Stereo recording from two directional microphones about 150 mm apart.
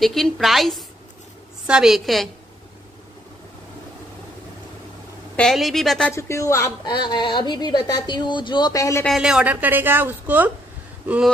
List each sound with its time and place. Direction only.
0.0 s a woman's voice: centre (ahead or behind)
5.3 s a woman's voice: 5° left (ahead or behind)
6.1 s speech: 20° left (ahead or behind)
6.9 s speech: 30° left (ahead or behind)
9.0 s a woman's voice: centre (ahead or behind)